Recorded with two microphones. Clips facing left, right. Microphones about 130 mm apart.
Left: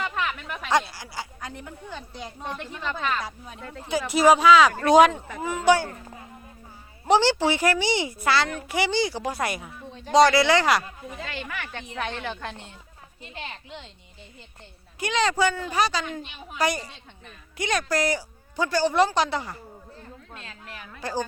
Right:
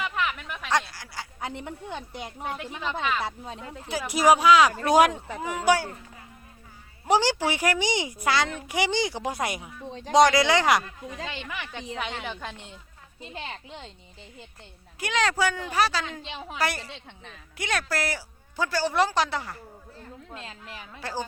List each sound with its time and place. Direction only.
0.3 s a sound: centre (ahead or behind)
1.4 s speech: 25° right (ahead or behind)
2.4 s a woman's voice: 10° right (ahead or behind)
7.1 s a woman's voice: 10° right (ahead or behind)
13.2 s speech: 30° right (ahead or behind)
14.9 s speech: 5° right (ahead or behind)
16.2 s a woman's voice: 90° right
17.6 s speech: 5° right (ahead or behind)
20.3 s speech: 30° right (ahead or behind)
21.0 s speech: 5° right (ahead or behind)